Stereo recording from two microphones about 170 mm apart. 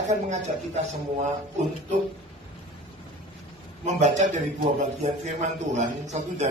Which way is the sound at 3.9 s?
45° right (ahead or behind).